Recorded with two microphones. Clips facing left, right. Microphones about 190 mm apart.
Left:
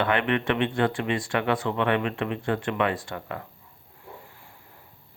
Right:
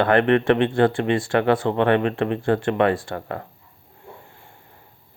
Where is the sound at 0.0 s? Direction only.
40° right (ahead or behind).